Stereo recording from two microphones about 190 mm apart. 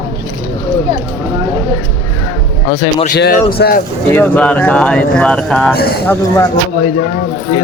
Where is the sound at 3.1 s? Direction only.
55° left (ahead or behind).